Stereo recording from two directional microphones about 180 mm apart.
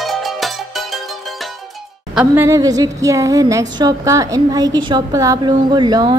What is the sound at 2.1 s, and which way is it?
Speech, 15° right (ahead or behind).